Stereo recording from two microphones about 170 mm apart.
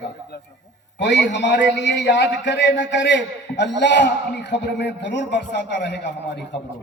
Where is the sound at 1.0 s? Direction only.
90° left.